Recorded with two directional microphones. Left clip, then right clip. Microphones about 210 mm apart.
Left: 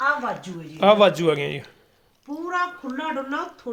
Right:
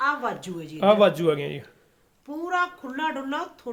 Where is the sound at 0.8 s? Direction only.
Centre (ahead or behind).